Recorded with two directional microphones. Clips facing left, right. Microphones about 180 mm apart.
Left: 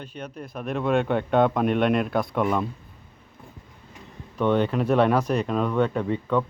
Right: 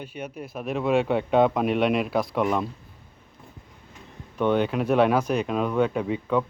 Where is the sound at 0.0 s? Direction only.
10° right (ahead or behind).